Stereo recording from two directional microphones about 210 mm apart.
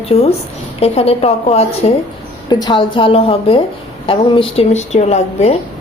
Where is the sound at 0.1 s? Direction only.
30° left (ahead or behind).